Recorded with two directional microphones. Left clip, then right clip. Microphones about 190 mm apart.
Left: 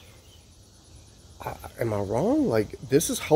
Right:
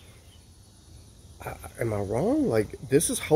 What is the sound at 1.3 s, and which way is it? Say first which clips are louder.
Speech: left 2 dB; 10° left (ahead or behind).